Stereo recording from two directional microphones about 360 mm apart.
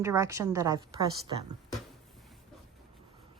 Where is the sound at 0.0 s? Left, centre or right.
Centre.